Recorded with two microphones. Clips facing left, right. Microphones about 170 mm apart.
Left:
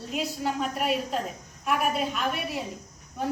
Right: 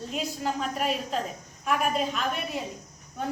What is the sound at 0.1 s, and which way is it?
A woman's voice, 5° left (ahead or behind).